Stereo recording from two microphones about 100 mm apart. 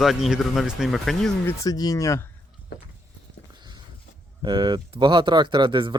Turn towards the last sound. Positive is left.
turn(degrees=-55)  # may be behind; listen again after turning